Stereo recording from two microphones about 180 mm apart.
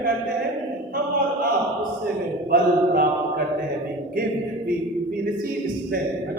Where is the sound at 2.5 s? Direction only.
55° right (ahead or behind).